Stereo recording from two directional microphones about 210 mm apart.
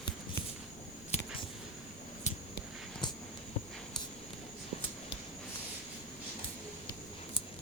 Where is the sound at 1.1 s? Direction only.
30° left (ahead or behind).